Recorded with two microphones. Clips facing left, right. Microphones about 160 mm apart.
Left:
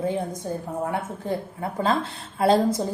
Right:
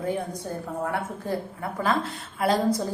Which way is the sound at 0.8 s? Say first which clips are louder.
Left 1 dB; 20° left (ahead or behind).